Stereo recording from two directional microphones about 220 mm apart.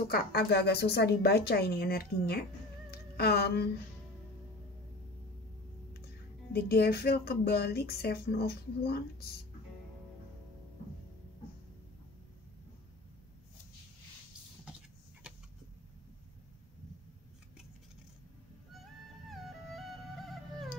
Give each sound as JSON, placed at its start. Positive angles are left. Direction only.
{"t": 0.1, "sound": "speech", "side_deg": 45}
{"t": 6.5, "sound": "speech", "side_deg": 45}
{"t": 19.2, "sound": "music", "side_deg": 0}